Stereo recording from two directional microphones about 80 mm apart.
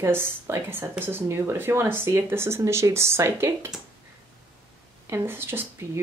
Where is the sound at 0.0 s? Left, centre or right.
Right.